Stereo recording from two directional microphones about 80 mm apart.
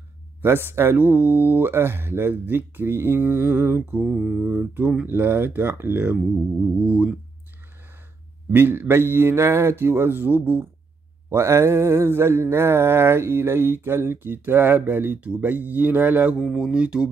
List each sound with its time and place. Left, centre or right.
0.4 s mantra: right
4.2 s speech: centre
4.6 s mantra: right
6.8 s speech: centre
8.5 s mantra: right
11.2 s mantra: right
16.3 s speech: centre